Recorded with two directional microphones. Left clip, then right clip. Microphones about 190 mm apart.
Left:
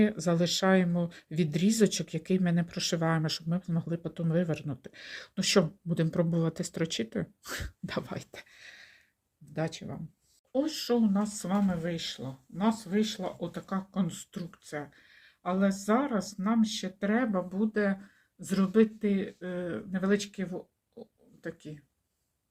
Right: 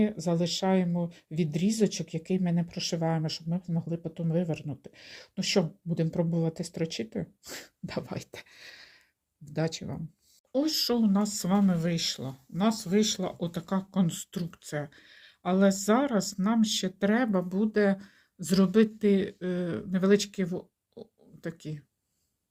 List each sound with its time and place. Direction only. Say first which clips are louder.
0.0 s speech: left 1 dB; centre (ahead or behind)
8.1 s a sound: right 1 dB; 25° right (ahead or behind)
9.5 s speech: right 3 dB; 30° right (ahead or behind)
10.5 s speech: right 2 dB; 50° right (ahead or behind)